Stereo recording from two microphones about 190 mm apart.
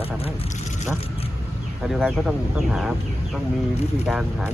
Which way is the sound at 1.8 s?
Centre (ahead or behind).